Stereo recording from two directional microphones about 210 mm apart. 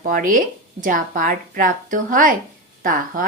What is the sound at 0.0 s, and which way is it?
A woman's voice, 40° right (ahead or behind).